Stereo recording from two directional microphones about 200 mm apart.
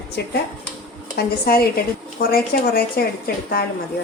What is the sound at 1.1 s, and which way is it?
A woman's voice, 50° left (ahead or behind).